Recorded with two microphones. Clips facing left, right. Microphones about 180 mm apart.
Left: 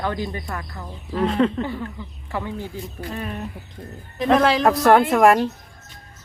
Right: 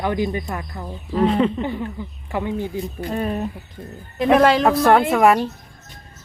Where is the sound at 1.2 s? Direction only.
5° right (ahead or behind).